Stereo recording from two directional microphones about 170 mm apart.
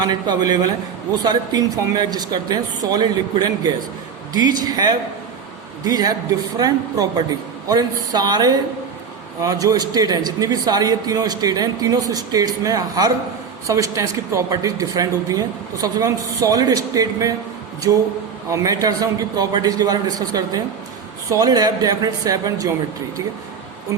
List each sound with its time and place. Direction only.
0.0 s a man's voice: 25° right (ahead or behind)
18.5 s a man's voice: 20° right (ahead or behind)